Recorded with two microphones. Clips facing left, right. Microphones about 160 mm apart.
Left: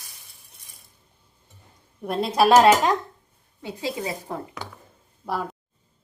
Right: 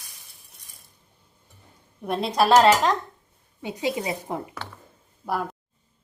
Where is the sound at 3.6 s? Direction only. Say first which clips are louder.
Right 2 dB; 15° right (ahead or behind).